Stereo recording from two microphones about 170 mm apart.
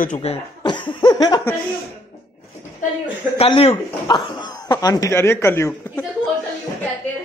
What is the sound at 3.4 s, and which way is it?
Speech, 35° left (ahead or behind).